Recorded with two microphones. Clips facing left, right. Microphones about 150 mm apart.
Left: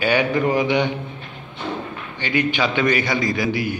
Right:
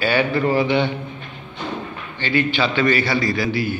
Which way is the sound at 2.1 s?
15° left (ahead or behind).